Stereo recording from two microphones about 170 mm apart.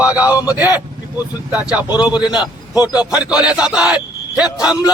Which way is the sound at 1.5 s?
10° right (ahead or behind).